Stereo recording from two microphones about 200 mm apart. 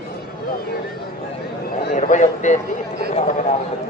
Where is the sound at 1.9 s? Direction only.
35° left (ahead or behind).